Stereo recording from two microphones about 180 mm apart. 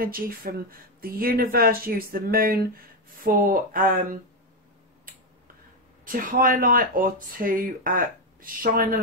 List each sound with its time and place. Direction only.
0.0 s speech: 55° right (ahead or behind)
6.0 s speech: 50° right (ahead or behind)